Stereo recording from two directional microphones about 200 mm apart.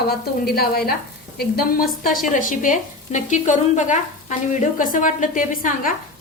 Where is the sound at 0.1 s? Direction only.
50° left (ahead or behind).